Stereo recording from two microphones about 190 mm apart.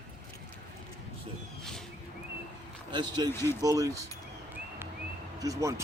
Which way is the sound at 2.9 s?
25° right (ahead or behind).